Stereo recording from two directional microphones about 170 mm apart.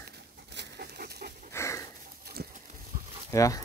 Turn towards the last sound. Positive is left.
turn(degrees=20)  # may be behind; listen again after turning